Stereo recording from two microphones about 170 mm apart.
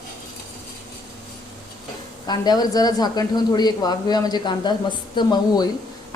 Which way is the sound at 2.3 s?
25° left (ahead or behind).